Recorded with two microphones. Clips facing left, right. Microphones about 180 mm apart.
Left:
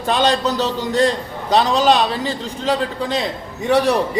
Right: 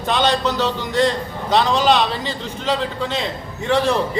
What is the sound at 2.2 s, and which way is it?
A man's voice, 15° left (ahead or behind).